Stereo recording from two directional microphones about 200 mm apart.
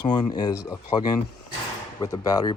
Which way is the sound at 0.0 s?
20° left (ahead or behind).